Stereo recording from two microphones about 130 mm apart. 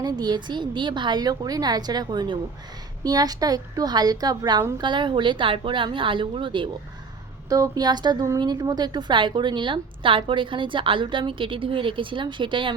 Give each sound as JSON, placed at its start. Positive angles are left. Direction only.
{"t": 0.0, "sound": "a woman's voice", "side_deg": -30}